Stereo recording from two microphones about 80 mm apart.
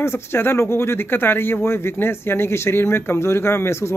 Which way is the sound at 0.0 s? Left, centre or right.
Left.